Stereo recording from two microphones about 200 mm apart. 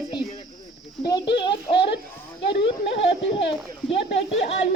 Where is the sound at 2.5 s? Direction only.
25° left (ahead or behind).